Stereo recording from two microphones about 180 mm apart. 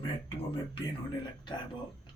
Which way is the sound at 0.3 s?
25° left (ahead or behind).